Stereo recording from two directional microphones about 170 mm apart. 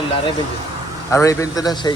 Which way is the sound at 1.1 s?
15° left (ahead or behind).